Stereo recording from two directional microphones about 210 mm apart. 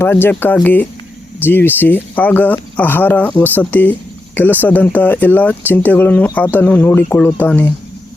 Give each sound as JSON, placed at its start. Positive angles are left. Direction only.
{"t": 0.0, "sound": "speech", "side_deg": 10}